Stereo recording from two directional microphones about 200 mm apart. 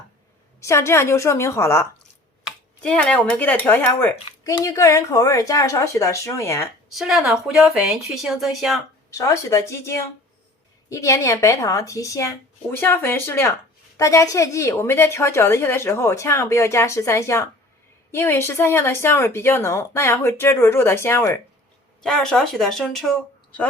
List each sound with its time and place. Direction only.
0.6 s a woman's voice: 15° left (ahead or behind)
6.9 s a woman's voice: centre (ahead or behind)
9.0 s a woman's voice: 15° left (ahead or behind)